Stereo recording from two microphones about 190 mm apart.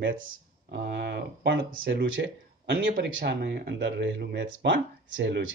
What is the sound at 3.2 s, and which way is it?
Speech, 60° right (ahead or behind).